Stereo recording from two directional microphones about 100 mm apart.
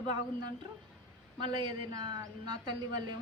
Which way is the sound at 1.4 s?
55° right (ahead or behind).